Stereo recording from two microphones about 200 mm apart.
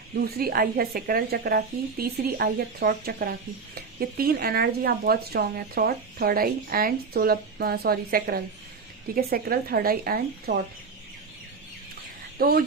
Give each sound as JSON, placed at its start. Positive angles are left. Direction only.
{"t": 0.3, "sound": "speech", "side_deg": -50}
{"t": 12.4, "sound": "speech", "side_deg": -50}